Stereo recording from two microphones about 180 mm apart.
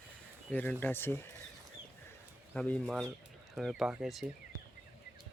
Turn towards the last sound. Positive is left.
turn(degrees=0)  # may be behind; listen again after turning